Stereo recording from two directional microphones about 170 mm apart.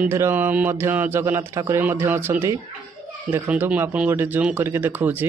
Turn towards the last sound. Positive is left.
turn(degrees=-10)  # may be behind; listen again after turning